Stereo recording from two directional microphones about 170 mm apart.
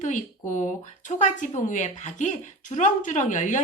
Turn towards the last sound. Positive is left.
turn(degrees=45)  # may be behind; listen again after turning